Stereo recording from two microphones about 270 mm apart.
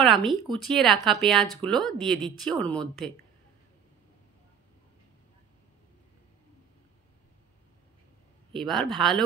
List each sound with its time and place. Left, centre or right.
0.0 s speech: centre
8.5 s speech: centre